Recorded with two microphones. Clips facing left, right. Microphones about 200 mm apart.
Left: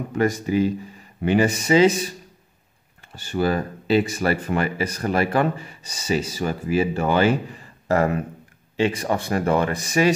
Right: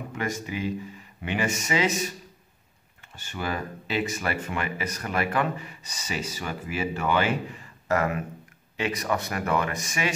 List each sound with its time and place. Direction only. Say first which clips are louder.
0.1 s speech: left 11 dB; 40° left (ahead or behind)
3.2 s speech: left 9 dB; 35° left (ahead or behind)